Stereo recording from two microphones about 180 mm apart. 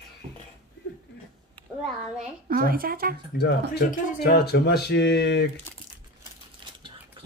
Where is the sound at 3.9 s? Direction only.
45° left (ahead or behind).